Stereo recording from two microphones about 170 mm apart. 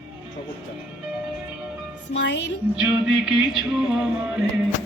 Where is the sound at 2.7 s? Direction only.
5° right (ahead or behind).